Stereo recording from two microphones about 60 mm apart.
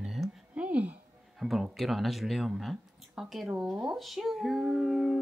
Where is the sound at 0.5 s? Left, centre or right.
Right.